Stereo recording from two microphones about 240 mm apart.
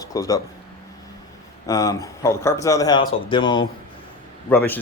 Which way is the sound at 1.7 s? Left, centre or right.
Centre.